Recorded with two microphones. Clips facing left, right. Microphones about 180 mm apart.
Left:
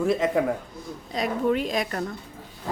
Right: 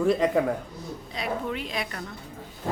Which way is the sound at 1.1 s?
45° left (ahead or behind).